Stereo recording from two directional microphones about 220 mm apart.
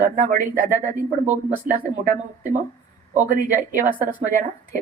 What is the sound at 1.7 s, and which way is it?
Speech, 40° right (ahead or behind).